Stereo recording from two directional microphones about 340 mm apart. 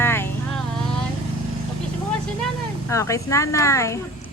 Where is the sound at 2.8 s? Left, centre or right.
Centre.